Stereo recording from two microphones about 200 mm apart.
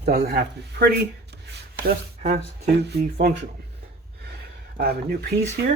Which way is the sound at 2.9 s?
55° right (ahead or behind).